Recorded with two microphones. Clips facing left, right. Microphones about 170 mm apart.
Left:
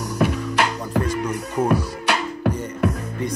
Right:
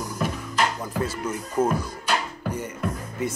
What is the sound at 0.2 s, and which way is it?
Music, 70° left (ahead or behind).